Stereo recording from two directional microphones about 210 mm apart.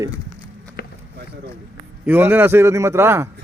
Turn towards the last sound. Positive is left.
turn(degrees=-10)  # may be behind; listen again after turning